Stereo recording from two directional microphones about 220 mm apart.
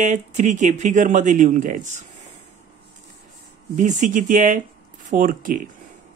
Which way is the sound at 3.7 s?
35° right (ahead or behind).